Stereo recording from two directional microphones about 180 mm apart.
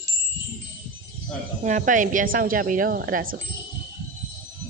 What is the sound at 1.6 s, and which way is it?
Speech, 45° right (ahead or behind).